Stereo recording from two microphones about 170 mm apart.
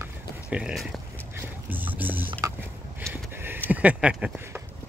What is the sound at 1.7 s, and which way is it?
Music, 10° right (ahead or behind).